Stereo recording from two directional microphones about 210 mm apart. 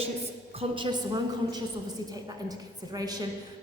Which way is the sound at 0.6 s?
20° right (ahead or behind).